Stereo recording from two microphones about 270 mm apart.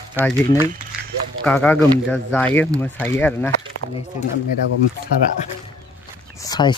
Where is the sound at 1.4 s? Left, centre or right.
Centre.